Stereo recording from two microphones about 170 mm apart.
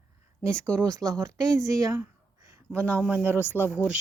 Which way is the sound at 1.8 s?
15° right (ahead or behind).